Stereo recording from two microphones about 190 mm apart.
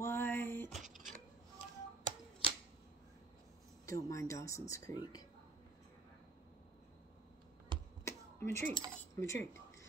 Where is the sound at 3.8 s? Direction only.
15° left (ahead or behind).